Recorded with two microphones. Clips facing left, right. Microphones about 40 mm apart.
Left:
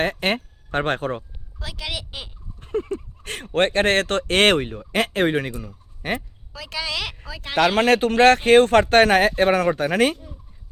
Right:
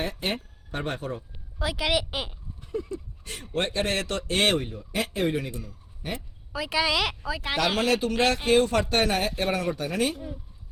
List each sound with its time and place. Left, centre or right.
0.0 s speech: left
1.5 s a woman's voice: centre
2.6 s speech: left
6.5 s a woman's voice: centre
7.8 s speech: left